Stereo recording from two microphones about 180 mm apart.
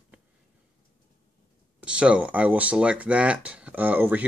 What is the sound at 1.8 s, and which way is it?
Speech, 5° right (ahead or behind).